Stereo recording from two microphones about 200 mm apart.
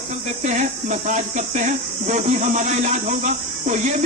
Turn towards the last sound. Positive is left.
turn(degrees=-40)  # may be behind; listen again after turning